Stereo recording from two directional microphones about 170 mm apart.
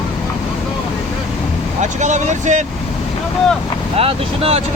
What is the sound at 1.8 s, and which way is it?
Speech, 45° right (ahead or behind).